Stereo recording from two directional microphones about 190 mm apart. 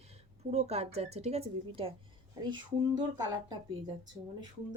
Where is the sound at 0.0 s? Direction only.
35° right (ahead or behind).